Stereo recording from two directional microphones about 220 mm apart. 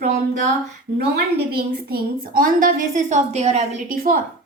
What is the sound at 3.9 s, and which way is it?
Speech, 40° right (ahead or behind).